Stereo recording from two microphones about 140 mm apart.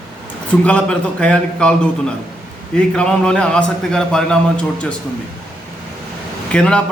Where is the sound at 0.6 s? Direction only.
5° left (ahead or behind).